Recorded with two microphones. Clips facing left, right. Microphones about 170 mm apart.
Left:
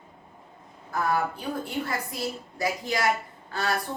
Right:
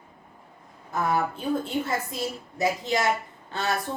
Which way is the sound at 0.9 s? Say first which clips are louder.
Right 1 dB; 20° right (ahead or behind).